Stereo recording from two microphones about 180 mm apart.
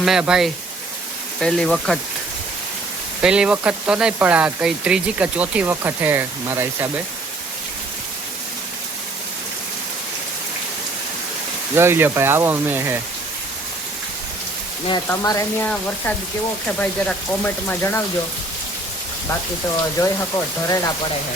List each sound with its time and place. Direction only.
0.0 s speech: 5° right (ahead or behind)
3.2 s speech: 5° right (ahead or behind)
11.7 s speech: 10° right (ahead or behind)
15.0 s speech: 15° left (ahead or behind)
20.0 s speech: 20° left (ahead or behind)